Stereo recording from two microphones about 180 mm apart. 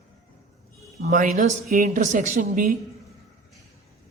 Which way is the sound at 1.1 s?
40° right (ahead or behind).